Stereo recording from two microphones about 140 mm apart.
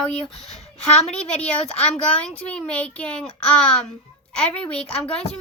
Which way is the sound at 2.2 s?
5° left (ahead or behind).